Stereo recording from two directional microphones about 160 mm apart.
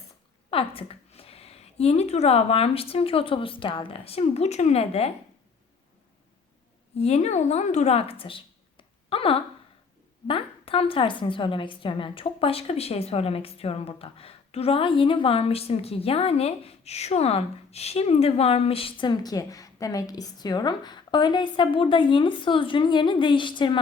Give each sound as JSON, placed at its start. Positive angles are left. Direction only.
{"t": 0.5, "sound": "a woman's voice", "side_deg": 35}
{"t": 7.0, "sound": "a woman's voice", "side_deg": 45}
{"t": 8.8, "sound": "a sound", "side_deg": 35}
{"t": 10.2, "sound": "a woman's voice", "side_deg": 35}